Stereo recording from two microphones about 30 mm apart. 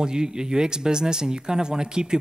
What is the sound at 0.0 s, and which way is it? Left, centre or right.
Speech, right.